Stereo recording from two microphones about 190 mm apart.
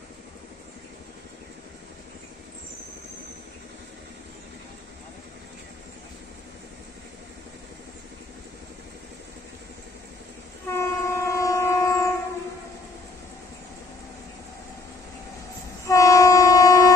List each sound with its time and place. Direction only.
10.7 s train: 15° left (ahead or behind)
15.9 s train: 15° left (ahead or behind)